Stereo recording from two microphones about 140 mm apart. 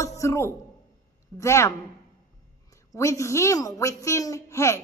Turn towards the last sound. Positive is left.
turn(degrees=20)  # may be behind; listen again after turning